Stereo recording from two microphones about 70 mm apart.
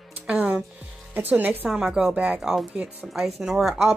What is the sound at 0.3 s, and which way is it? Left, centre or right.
Music, centre.